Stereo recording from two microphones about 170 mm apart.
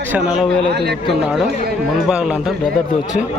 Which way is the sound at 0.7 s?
75° right (ahead or behind).